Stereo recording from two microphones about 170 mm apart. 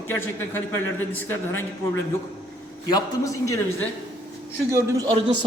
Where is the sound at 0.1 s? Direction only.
15° left (ahead or behind).